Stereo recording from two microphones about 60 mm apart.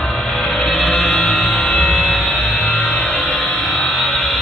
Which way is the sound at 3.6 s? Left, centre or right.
Centre.